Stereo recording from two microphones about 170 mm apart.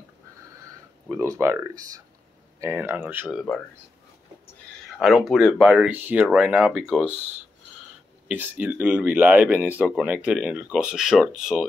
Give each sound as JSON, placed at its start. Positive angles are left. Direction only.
{"t": 1.1, "sound": "speech", "side_deg": -15}
{"t": 5.0, "sound": "speech", "side_deg": 0}
{"t": 8.3, "sound": "speech", "side_deg": -10}